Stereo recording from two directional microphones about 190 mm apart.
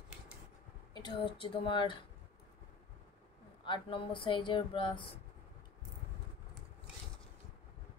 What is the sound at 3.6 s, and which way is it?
Speech, 25° left (ahead or behind).